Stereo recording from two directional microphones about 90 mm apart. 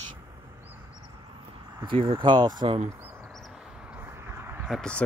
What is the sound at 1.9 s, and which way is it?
Speech, 80° right.